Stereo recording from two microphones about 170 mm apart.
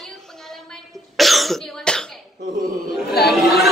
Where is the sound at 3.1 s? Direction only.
70° left (ahead or behind).